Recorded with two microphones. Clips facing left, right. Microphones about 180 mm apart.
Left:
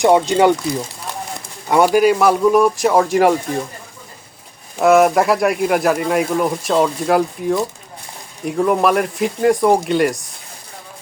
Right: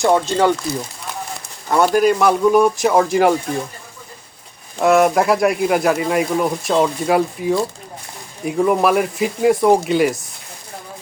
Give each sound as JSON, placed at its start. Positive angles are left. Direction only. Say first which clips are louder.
{"t": 0.0, "sound": "speech", "louder": "left 3 dB", "side_deg": 20}
{"t": 1.6, "sound": "speech", "louder": "left 2 dB", "side_deg": 10}
{"t": 4.8, "sound": "speech", "louder": "left 2 dB", "side_deg": 0}